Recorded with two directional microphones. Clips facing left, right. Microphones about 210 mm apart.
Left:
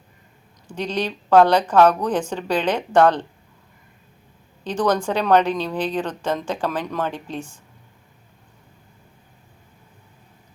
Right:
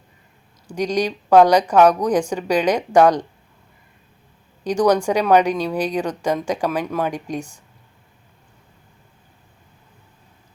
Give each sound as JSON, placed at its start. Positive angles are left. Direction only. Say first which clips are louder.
{"t": 0.7, "sound": "a woman's voice", "louder": "right 4 dB", "side_deg": -10}
{"t": 4.6, "sound": "a woman's voice", "louder": "right 4 dB", "side_deg": -10}
{"t": 7.3, "sound": "a woman's voice", "louder": "right 3 dB", "side_deg": -40}